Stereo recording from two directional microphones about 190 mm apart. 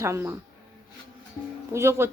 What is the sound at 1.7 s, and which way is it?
Speech, 15° right (ahead or behind).